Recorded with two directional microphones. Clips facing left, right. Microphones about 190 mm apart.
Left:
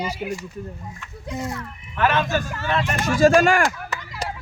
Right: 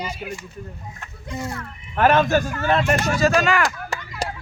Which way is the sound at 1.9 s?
45° right (ahead or behind).